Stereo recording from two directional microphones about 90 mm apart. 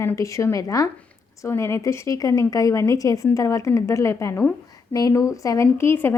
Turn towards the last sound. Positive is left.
turn(degrees=25)  # may be behind; listen again after turning